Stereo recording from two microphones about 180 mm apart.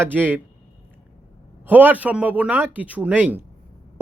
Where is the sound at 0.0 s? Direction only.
10° right (ahead or behind).